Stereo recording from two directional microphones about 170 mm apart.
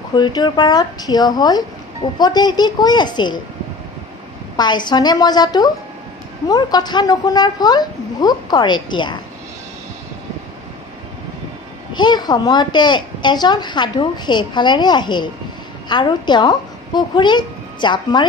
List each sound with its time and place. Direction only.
0.2 s a child's voice: 25° left (ahead or behind)
4.6 s a child's voice: 25° left (ahead or behind)
11.9 s a child's voice: 25° left (ahead or behind)